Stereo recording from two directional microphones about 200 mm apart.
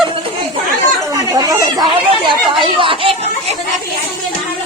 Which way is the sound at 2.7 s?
25° right (ahead or behind).